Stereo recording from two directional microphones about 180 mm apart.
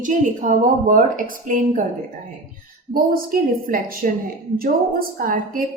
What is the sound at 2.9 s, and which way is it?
A woman's voice, 50° right (ahead or behind).